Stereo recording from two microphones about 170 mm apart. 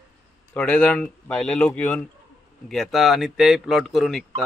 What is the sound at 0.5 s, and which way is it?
A man's voice, 5° left (ahead or behind).